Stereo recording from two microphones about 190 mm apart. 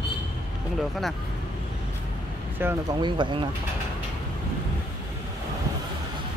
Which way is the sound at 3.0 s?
25° right (ahead or behind).